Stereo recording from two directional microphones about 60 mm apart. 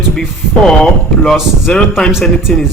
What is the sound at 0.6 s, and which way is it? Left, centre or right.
Speech, centre.